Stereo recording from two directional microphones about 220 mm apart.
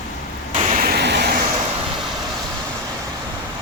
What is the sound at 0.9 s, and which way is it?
Vehicle, 50° right (ahead or behind).